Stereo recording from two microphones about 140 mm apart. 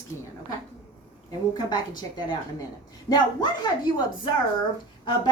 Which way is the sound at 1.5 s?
30° left (ahead or behind).